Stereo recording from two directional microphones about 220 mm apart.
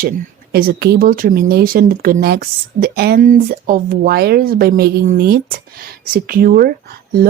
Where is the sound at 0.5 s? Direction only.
45° right (ahead or behind).